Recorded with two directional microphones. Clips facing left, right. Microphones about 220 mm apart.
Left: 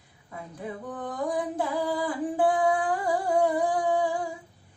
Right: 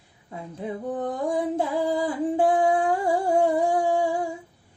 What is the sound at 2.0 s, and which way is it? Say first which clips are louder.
Singing: right 2 dB; 25° right (ahead or behind).